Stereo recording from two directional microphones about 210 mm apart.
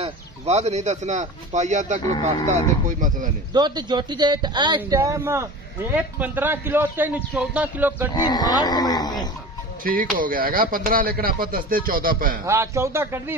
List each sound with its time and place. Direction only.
0.0 s speech: 30° right (ahead or behind)
3.5 s a man's voice: 20° right (ahead or behind)
8.1 s speech: 20° left (ahead or behind)
9.8 s speech: 40° right (ahead or behind)
12.4 s a man's voice: 15° right (ahead or behind)